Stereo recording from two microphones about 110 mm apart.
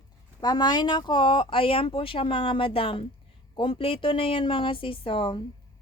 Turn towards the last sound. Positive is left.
turn(degrees=50)  # may be behind; listen again after turning